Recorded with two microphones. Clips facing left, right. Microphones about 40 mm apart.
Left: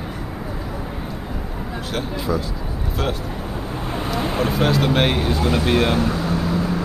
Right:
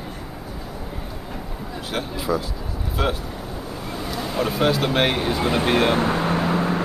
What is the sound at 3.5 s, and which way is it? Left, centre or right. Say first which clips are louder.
Vehicle: left 5 dB; left.